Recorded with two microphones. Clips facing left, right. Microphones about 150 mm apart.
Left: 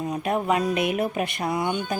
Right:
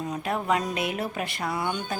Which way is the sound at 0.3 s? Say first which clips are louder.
Left 4 dB; 15° left (ahead or behind).